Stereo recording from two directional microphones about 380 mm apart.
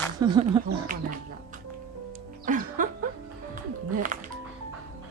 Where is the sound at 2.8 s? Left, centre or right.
Right.